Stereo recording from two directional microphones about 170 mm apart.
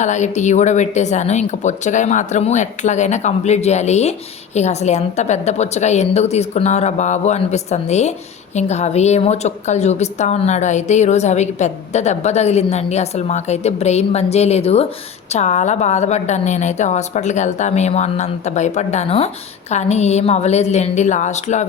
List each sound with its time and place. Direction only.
0.0 s a woman's voice: 45° left (ahead or behind)